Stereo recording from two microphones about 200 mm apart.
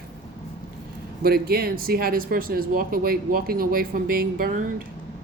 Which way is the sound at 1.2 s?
50° right (ahead or behind).